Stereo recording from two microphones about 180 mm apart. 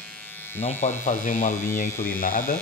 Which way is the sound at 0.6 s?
40° left (ahead or behind).